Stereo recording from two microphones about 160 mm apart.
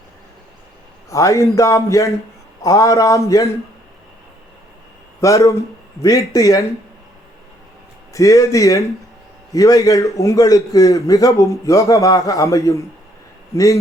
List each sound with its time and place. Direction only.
1.1 s a man's voice: 20° left (ahead or behind)
5.2 s a man's voice: 20° left (ahead or behind)
8.1 s a man's voice: 20° left (ahead or behind)